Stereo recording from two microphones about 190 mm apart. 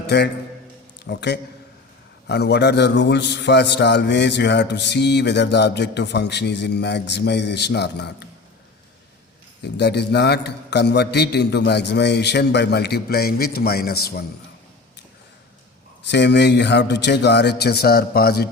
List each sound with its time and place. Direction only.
0.1 s a man's voice: 65° left (ahead or behind)
9.6 s a man's voice: 60° left (ahead or behind)
16.0 s a man's voice: 65° left (ahead or behind)